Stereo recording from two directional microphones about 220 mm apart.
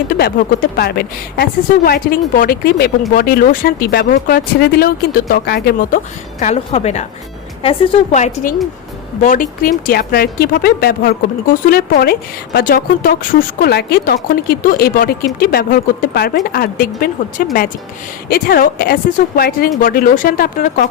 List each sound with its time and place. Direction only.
0.2 s speech: 45° left (ahead or behind)
6.4 s speech: 30° left (ahead or behind)